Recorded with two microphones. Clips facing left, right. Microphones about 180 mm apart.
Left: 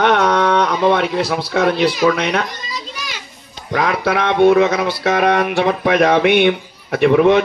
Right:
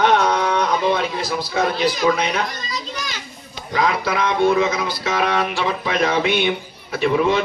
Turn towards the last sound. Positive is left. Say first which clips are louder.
# left 6 dB
turn(degrees=60)  # may be behind; listen again after turning